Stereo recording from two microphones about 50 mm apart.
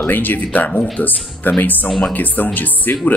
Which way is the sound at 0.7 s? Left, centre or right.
Centre.